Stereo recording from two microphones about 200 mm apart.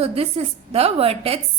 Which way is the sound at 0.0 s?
30° right (ahead or behind).